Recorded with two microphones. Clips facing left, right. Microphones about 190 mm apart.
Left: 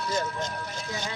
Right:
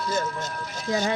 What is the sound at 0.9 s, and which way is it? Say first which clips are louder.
Speech: right 12 dB; 80° right.